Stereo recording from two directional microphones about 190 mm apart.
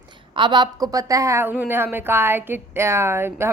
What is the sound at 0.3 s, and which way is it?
A woman's voice, 25° right (ahead or behind).